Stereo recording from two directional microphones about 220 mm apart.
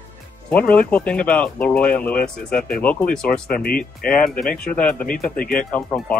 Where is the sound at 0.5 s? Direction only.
5° left (ahead or behind).